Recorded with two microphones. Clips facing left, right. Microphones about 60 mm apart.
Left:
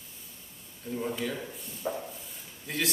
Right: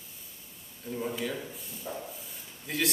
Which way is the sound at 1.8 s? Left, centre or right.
Left.